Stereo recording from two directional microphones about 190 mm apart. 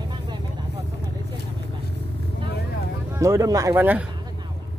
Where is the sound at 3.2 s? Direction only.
15° right (ahead or behind).